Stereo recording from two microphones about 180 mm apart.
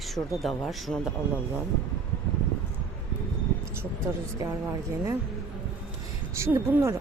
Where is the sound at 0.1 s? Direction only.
Centre (ahead or behind).